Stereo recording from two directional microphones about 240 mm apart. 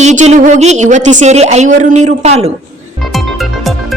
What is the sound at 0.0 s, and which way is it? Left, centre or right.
A woman's voice, right.